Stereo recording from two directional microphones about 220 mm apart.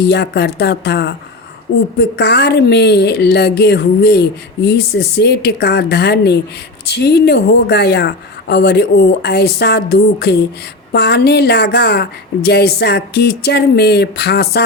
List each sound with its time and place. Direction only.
0.0 s a woman's voice: 50° left (ahead or behind)